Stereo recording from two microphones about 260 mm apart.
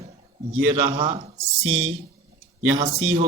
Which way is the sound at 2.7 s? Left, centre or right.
Right.